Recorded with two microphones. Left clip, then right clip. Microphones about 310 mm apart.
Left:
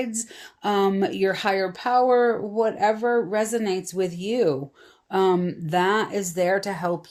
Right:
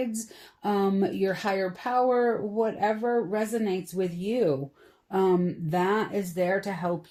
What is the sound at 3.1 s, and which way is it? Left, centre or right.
Speech, left.